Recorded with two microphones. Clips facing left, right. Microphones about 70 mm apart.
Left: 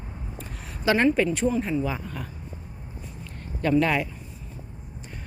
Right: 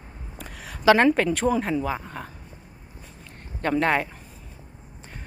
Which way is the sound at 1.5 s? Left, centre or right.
Right.